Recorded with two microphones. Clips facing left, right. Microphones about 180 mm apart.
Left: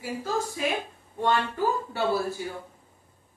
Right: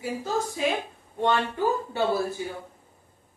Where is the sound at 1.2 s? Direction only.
20° right (ahead or behind).